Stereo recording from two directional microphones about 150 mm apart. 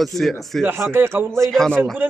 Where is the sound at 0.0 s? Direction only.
Centre (ahead or behind).